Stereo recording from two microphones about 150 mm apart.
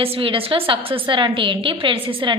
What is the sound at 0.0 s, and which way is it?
A woman's voice, 35° right (ahead or behind).